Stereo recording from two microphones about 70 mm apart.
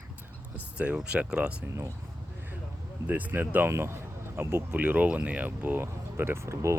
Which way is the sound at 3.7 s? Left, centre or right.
Right.